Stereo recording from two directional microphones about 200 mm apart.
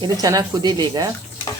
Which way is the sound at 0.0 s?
20° right (ahead or behind).